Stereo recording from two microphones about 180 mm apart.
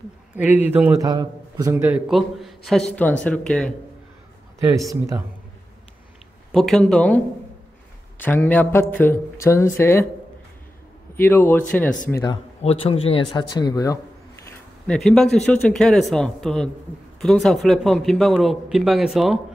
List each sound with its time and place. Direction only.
0.4 s a man's voice: 10° right (ahead or behind)
1.0 s speech: 20° right (ahead or behind); by 3.7 s 5° left (ahead or behind)
6.5 s speech: centre (ahead or behind)
8.2 s speech: 10° left (ahead or behind)
11.1 s speech: 10° left (ahead or behind)
12.6 s a man's voice: 30° left (ahead or behind)
14.9 s speech: 5° left (ahead or behind)